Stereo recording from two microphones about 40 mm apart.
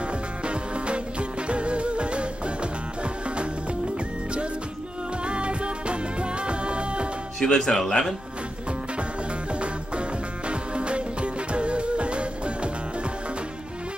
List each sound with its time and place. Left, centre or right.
0.5 s music: right
5.2 s music: right
7.3 s speech: centre
9.5 s music: right